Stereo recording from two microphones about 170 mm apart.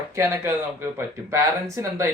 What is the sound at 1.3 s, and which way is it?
Speech, 15° right (ahead or behind).